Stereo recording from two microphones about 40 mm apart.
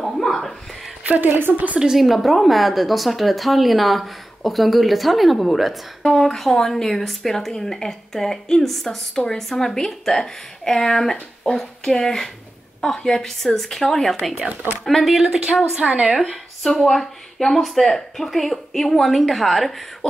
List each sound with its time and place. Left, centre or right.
0.0 s a sound: centre
1.0 s a woman's voice: right
1.8 s a woman's voice: centre
6.0 s a woman's voice: centre
9.4 s a woman's voice: centre
15.7 s a woman's voice: right
16.2 s a woman's voice: centre